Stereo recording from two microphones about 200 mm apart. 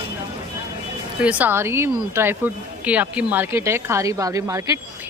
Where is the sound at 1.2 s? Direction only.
5° right (ahead or behind).